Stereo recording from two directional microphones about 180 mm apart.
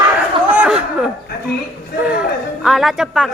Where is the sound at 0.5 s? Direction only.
10° right (ahead or behind).